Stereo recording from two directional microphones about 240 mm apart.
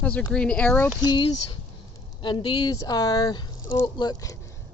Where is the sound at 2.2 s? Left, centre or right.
Centre.